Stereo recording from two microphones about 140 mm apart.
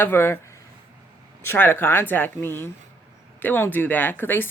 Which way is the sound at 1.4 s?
15° left (ahead or behind).